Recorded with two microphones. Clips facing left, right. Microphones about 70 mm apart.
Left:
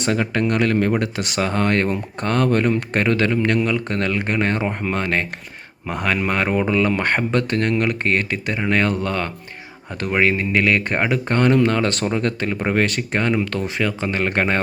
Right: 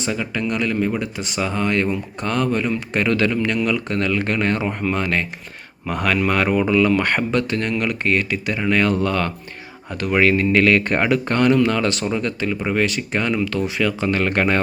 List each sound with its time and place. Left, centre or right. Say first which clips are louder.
0.0 s speech: left 3 dB; left
1.4 s speech: left 1 dB; left
4.2 s speech: even; left